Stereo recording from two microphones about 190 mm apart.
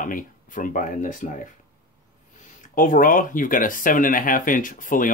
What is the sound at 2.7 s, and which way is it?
Speech, 45° left (ahead or behind).